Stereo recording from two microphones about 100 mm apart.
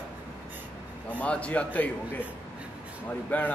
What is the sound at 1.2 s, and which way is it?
A man's voice, 15° left (ahead or behind).